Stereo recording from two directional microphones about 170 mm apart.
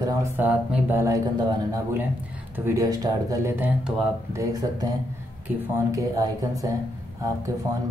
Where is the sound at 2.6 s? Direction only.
20° right (ahead or behind).